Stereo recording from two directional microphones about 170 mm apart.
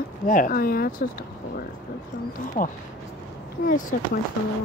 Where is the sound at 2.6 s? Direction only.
45° left (ahead or behind).